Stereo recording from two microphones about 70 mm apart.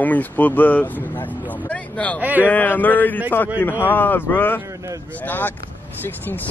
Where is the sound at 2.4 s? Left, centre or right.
Left.